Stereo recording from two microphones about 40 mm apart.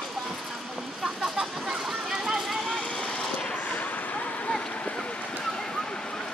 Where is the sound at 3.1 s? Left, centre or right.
Left.